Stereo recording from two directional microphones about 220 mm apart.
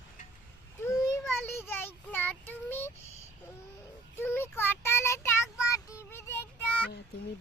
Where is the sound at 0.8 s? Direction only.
15° left (ahead or behind).